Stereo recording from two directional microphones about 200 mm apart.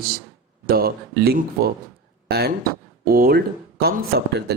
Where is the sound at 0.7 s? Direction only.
50° right (ahead or behind).